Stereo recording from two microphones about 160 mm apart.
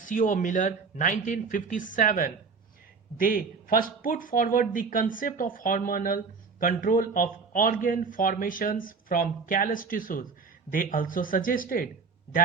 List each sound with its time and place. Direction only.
0.0 s speech: 55° left (ahead or behind)